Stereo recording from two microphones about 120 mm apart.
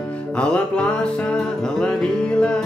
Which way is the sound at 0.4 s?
10° left (ahead or behind).